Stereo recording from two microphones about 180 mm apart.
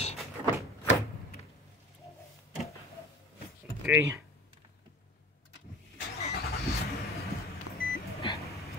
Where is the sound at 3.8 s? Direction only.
10° right (ahead or behind).